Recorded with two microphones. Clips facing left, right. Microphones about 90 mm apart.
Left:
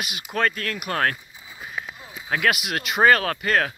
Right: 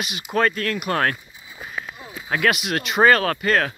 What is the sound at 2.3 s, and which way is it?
Speech, 5° left (ahead or behind).